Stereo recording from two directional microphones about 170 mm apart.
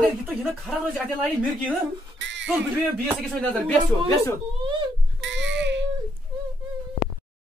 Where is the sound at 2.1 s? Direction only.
90° right.